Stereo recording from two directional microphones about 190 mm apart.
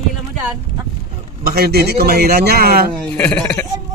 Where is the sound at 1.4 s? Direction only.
55° right (ahead or behind).